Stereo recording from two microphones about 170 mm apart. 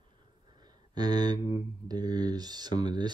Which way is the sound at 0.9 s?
25° right (ahead or behind).